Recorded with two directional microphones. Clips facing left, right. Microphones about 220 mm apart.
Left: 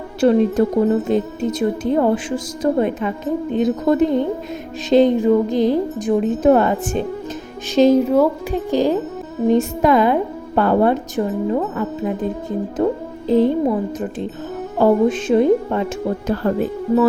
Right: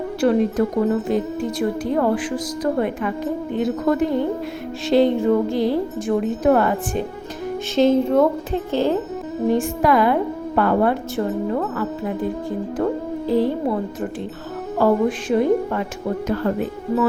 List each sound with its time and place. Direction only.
0.2 s speech: 25° left (ahead or behind)
7.8 s a woman's voice: 10° left (ahead or behind)
14.8 s speech: 25° left (ahead or behind)